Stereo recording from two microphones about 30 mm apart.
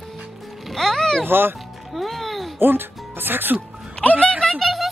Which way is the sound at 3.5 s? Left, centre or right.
Right.